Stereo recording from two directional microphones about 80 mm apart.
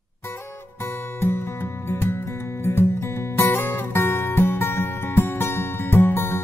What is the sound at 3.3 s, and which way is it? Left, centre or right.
Music, left.